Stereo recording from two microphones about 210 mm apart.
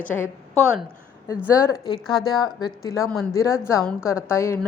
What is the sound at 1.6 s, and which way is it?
A woman's voice, 15° left (ahead or behind).